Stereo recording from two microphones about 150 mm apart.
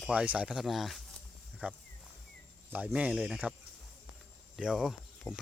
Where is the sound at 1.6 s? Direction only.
10° right (ahead or behind).